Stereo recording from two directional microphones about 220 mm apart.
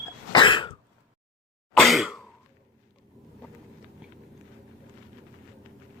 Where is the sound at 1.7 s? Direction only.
Centre (ahead or behind).